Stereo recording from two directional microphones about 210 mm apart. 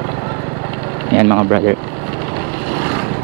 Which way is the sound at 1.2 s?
20° right (ahead or behind).